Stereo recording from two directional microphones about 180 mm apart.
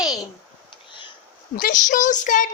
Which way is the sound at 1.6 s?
45° left (ahead or behind).